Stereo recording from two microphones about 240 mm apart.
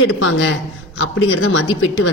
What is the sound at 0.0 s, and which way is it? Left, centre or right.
A woman's voice, left.